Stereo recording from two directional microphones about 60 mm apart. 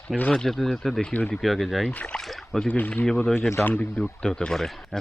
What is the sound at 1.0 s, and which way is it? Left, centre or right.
Speech, left.